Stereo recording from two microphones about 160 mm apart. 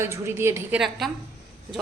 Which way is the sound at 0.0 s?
15° right (ahead or behind).